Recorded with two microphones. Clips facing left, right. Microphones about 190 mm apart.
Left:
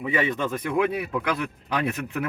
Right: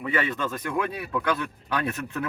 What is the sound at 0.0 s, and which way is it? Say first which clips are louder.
Speech: left 2 dB; 15° left (ahead or behind).